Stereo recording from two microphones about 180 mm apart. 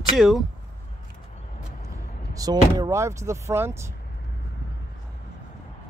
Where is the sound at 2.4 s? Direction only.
20° right (ahead or behind).